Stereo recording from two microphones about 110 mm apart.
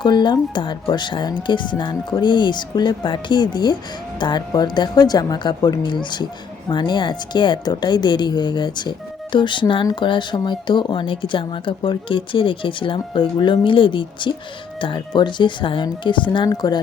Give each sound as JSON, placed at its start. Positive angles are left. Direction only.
{"t": 0.0, "sound": "speech", "side_deg": 40}